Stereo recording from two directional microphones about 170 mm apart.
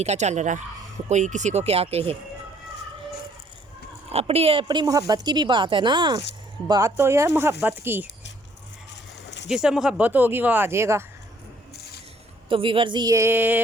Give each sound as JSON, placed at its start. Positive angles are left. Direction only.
{"t": 0.0, "sound": "speech", "side_deg": -40}
{"t": 4.1, "sound": "a woman's voice", "side_deg": -35}
{"t": 9.5, "sound": "speech", "side_deg": -5}
{"t": 12.5, "sound": "a woman's voice", "side_deg": -30}